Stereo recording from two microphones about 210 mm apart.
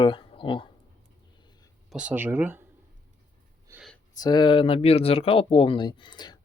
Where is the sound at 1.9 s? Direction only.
5° right (ahead or behind).